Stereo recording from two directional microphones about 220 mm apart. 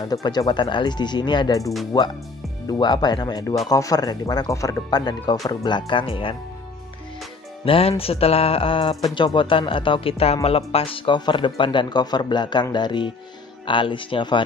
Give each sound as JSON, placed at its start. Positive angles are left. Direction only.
{"t": 0.0, "sound": "speech", "side_deg": 20}
{"t": 7.6, "sound": "speech", "side_deg": 25}